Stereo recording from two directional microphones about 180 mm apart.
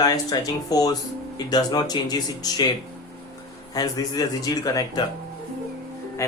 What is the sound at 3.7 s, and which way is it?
Speech, 20° left (ahead or behind).